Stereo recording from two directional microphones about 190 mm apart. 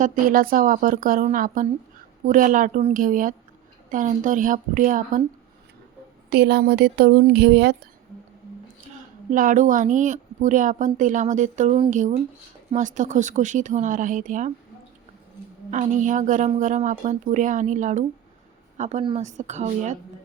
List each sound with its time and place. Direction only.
0.0 s speech: 45° right (ahead or behind)
6.3 s speech: 60° right (ahead or behind)
9.3 s a woman's voice: 45° right (ahead or behind)
15.7 s a woman's voice: 40° right (ahead or behind)